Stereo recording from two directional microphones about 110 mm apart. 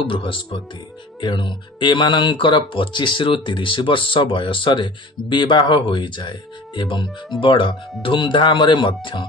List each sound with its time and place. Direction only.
0.0 s speech: 50° left (ahead or behind)